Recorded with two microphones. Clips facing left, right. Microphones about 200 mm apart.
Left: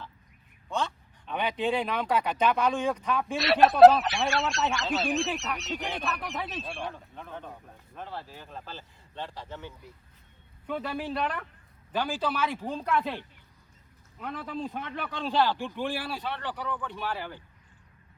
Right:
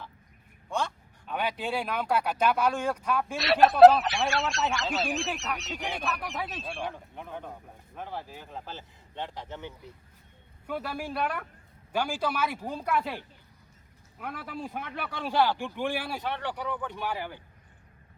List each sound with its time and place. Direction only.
0.7 s speech: 10° right (ahead or behind)
6.9 s a man's voice: 15° right (ahead or behind)
10.7 s a man's voice: 10° right (ahead or behind)